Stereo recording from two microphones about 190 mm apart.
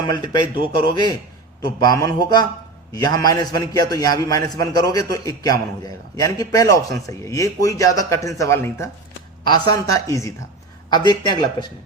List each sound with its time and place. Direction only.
0.0 s a man's voice: 25° left (ahead or behind)